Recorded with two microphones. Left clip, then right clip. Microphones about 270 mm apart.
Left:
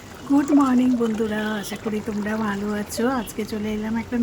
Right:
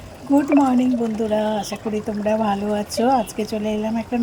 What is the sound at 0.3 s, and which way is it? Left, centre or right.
Speech, centre.